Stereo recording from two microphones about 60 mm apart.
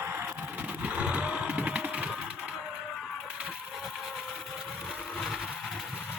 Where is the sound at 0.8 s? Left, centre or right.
Centre.